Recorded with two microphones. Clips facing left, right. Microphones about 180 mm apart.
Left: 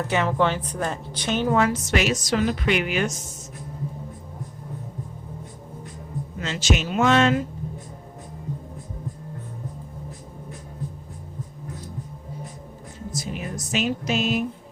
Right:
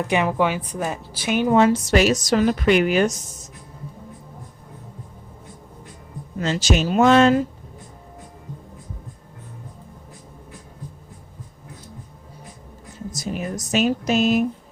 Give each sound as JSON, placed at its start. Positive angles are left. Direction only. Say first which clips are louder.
{"t": 0.0, "sound": "speech", "louder": "right 2 dB", "side_deg": -15}
{"t": 1.5, "sound": "a woman's voice", "louder": "right 8 dB", "side_deg": -30}
{"t": 6.4, "sound": "a woman's voice", "louder": "right 4 dB", "side_deg": -35}
{"t": 13.1, "sound": "speech", "louder": "right 4 dB", "side_deg": -40}